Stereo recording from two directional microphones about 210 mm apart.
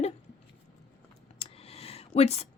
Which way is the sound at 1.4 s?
30° left (ahead or behind).